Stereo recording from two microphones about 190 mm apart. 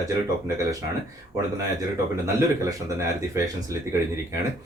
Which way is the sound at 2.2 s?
15° right (ahead or behind).